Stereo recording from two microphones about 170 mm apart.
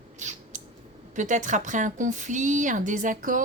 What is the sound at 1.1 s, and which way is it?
Speech, 45° right (ahead or behind).